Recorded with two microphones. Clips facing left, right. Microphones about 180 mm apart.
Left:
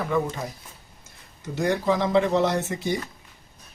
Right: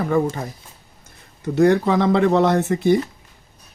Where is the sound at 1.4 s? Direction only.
60° right (ahead or behind).